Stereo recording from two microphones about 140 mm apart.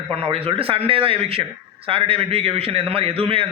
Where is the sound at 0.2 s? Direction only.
45° right (ahead or behind).